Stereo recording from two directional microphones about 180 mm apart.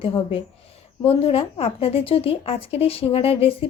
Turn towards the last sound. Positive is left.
turn(degrees=35)  # may be behind; listen again after turning